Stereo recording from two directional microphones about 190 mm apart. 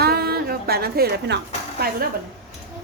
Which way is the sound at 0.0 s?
55° right (ahead or behind).